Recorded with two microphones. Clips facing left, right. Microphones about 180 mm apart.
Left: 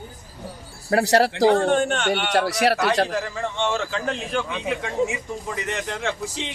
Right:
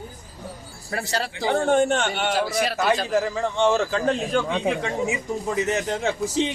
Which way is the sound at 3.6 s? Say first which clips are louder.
Right 5 dB; 35° right (ahead or behind).